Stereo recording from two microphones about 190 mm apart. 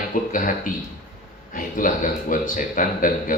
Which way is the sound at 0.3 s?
45° left (ahead or behind).